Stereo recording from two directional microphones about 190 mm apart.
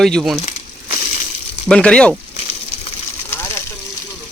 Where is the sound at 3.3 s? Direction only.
10° left (ahead or behind).